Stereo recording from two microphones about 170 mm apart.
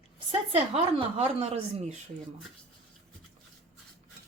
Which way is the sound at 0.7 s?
35° right (ahead or behind).